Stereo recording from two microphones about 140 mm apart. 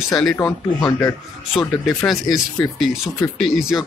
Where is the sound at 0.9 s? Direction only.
25° left (ahead or behind).